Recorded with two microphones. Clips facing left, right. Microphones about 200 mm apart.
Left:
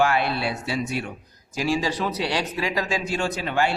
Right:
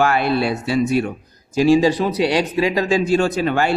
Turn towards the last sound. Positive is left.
turn(degrees=-45)  # may be behind; listen again after turning